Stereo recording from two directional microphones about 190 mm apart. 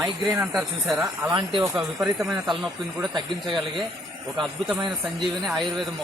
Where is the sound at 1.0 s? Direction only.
20° right (ahead or behind).